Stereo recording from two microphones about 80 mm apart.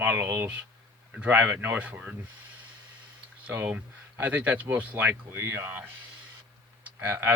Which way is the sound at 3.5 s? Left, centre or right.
Right.